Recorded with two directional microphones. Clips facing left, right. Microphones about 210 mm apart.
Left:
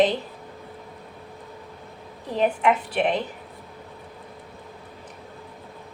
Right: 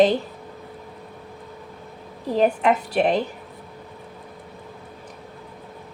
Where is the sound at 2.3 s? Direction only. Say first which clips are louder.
Right 2 dB; 40° right (ahead or behind).